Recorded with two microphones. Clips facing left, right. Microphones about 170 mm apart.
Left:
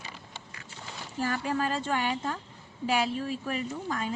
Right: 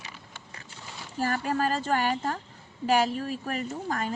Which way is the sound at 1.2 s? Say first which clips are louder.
Right 2 dB; 40° right (ahead or behind).